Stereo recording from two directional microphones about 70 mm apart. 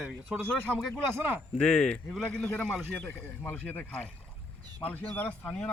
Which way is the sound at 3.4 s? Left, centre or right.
Left.